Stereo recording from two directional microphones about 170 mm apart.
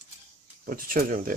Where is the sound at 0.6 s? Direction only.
55° right (ahead or behind).